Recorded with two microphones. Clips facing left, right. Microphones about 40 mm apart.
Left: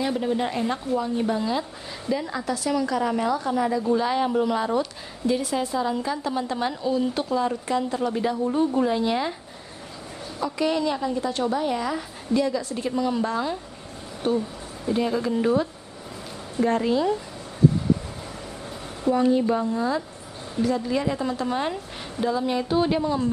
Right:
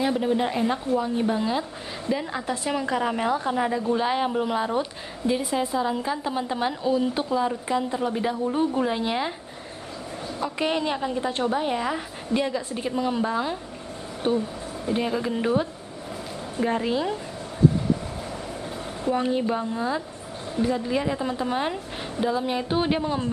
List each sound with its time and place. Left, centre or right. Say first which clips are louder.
0.0 s a woman's voice: right 1 dB; centre
10.4 s a woman's voice: left 2 dB; right; by 17.1 s centre
19.0 s a woman's voice: left 4 dB; right